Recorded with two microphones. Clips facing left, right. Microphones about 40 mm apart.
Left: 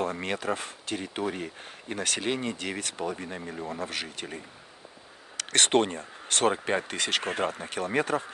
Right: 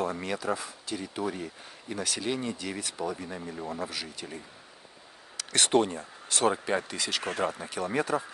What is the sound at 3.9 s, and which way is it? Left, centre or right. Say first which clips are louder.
Speech: left 3 dB; left.